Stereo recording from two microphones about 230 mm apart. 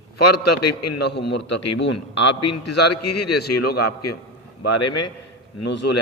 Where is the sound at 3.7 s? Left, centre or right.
Left.